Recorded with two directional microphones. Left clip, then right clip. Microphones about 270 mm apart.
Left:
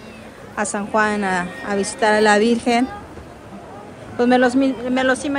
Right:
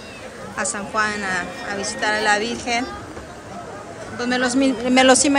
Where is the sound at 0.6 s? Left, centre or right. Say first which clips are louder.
Left 3 dB; centre.